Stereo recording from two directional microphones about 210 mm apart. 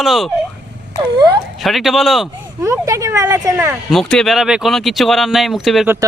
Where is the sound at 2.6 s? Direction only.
15° right (ahead or behind).